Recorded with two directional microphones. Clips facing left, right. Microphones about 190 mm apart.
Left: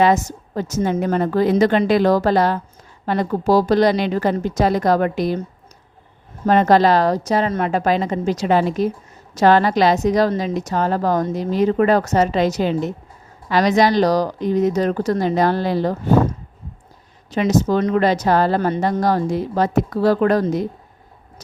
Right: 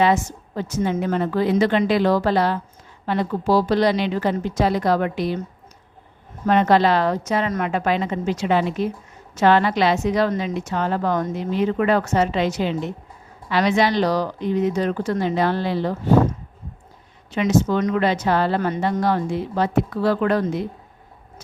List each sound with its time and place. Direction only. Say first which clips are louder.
0.0 s a woman's voice: left 3 dB; 40° left (ahead or behind)
6.4 s a woman's voice: left 3 dB; 40° left (ahead or behind)
17.3 s a woman's voice: left 2 dB; 40° left (ahead or behind)